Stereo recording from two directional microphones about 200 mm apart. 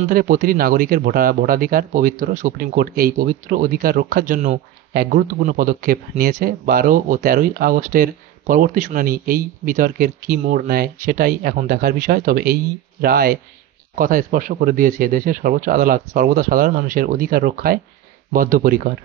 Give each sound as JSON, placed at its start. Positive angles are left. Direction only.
{"t": 0.1, "sound": "speech", "side_deg": -45}